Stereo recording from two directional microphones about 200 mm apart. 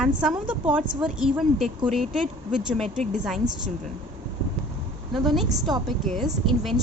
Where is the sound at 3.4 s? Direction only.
20° right (ahead or behind).